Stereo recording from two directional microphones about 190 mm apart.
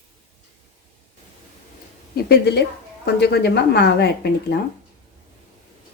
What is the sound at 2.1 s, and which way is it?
A woman's voice, 60° left (ahead or behind).